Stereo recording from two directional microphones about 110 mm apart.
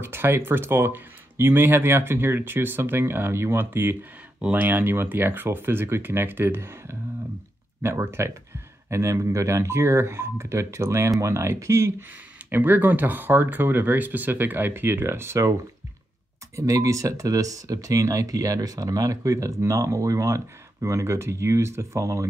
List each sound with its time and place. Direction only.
0.0 s speech: 20° right (ahead or behind)
16.5 s speech: 30° right (ahead or behind)